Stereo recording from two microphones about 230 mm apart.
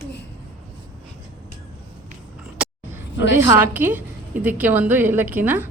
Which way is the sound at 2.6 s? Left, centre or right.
Centre.